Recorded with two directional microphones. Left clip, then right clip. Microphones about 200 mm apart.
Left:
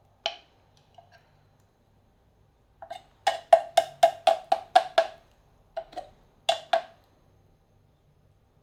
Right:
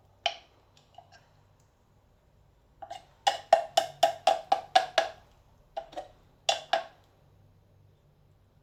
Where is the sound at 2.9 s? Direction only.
10° left (ahead or behind).